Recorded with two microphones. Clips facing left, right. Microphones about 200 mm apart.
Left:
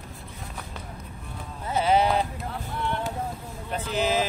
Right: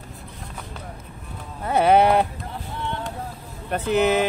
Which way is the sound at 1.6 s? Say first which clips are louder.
Right 6 dB; 65° right (ahead or behind).